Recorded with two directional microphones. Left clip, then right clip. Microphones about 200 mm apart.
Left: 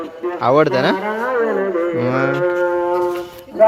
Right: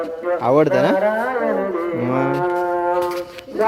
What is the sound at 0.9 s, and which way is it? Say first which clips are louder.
Speech: right 1 dB; 40° right (ahead or behind).